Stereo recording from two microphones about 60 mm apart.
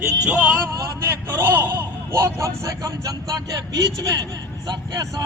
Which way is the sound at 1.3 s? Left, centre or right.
Right.